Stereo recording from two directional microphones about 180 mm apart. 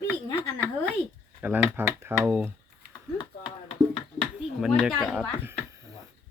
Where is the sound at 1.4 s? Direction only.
10° right (ahead or behind).